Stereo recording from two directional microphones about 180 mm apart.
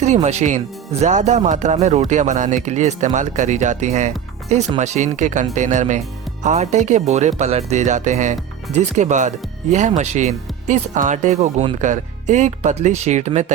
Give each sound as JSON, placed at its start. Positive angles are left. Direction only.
{"t": 0.0, "sound": "speech", "side_deg": -40}